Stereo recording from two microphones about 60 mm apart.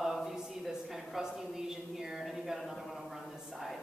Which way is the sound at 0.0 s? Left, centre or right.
Centre.